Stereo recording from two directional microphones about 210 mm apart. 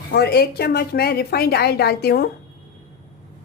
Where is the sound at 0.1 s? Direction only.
50° left (ahead or behind).